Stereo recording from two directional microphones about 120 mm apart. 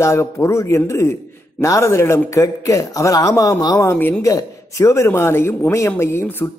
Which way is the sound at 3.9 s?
15° left (ahead or behind).